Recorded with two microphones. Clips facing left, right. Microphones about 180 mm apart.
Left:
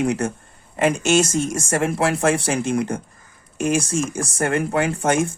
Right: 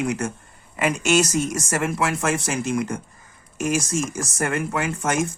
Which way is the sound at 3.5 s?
30° left (ahead or behind).